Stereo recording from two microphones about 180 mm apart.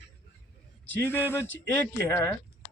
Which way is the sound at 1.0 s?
10° left (ahead or behind).